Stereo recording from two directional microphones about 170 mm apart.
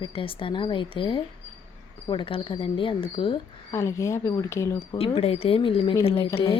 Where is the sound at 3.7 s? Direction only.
15° left (ahead or behind).